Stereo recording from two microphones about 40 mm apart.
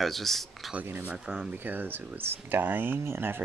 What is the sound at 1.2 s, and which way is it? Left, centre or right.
Speech, right.